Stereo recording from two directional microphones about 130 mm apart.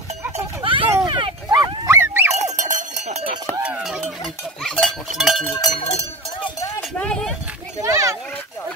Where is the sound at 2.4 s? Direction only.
65° right (ahead or behind).